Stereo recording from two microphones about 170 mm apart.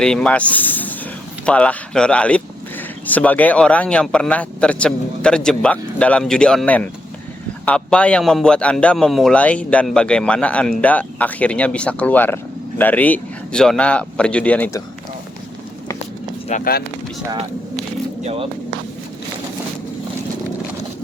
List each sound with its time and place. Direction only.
0.0 s speech: 5° left (ahead or behind)
16.5 s speech: 55° left (ahead or behind)
18.2 s speech: 40° right (ahead or behind)